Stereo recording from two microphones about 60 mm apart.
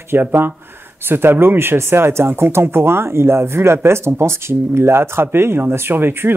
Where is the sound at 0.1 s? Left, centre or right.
Right.